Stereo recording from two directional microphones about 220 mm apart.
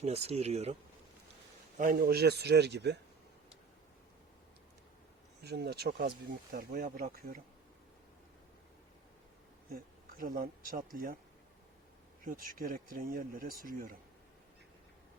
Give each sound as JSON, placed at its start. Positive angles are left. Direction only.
{"t": 0.0, "sound": "speech", "side_deg": -30}
{"t": 1.8, "sound": "speech", "side_deg": -40}
{"t": 5.4, "sound": "speech", "side_deg": -45}
{"t": 10.2, "sound": "speech", "side_deg": -40}
{"t": 12.2, "sound": "speech", "side_deg": -40}